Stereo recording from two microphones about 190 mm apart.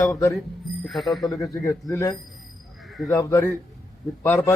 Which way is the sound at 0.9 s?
Centre (ahead or behind).